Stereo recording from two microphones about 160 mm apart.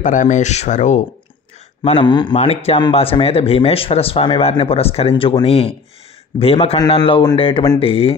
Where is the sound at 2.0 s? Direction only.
30° left (ahead or behind).